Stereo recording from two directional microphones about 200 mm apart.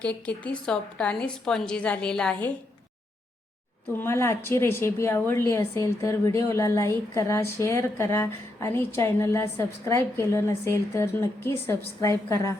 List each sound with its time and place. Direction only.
0.0 s a woman's voice: 5° left (ahead or behind)
3.9 s a woman's voice: 15° left (ahead or behind)